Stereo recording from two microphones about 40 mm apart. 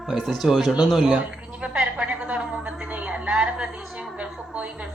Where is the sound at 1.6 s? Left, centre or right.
Right.